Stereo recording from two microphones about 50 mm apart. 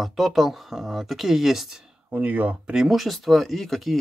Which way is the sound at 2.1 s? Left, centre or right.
Right.